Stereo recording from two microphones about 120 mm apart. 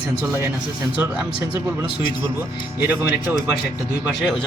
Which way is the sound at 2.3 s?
15° right (ahead or behind).